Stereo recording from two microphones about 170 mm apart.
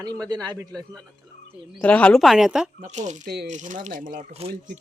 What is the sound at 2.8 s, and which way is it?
Speech, 45° right (ahead or behind).